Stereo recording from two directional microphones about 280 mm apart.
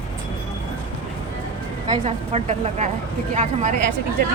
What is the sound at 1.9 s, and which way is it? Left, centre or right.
A woman's voice, right.